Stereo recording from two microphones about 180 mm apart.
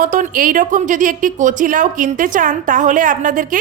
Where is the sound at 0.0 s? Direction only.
45° right (ahead or behind).